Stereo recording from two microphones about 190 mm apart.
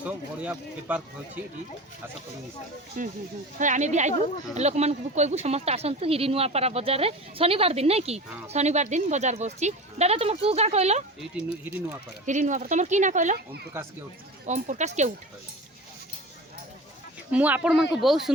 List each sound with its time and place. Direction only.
0.0 s speech: 5° right (ahead or behind)
3.0 s speech: 45° right (ahead or behind)
12.2 s speech: 40° right (ahead or behind)
13.7 s speech: 15° right (ahead or behind)
14.4 s speech: 40° right (ahead or behind)
17.3 s speech: 5° right (ahead or behind)